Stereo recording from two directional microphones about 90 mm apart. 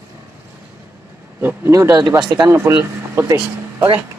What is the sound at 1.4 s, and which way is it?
Speech, 20° right (ahead or behind).